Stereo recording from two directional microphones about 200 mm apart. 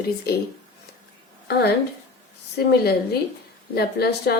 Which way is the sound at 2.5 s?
50° left (ahead or behind).